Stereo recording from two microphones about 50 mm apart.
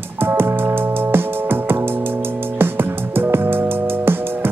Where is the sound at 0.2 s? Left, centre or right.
Right.